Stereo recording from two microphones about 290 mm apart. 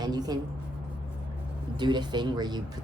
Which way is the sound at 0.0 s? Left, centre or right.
Centre.